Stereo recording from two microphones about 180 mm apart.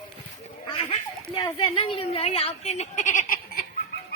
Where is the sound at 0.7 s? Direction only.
30° left (ahead or behind).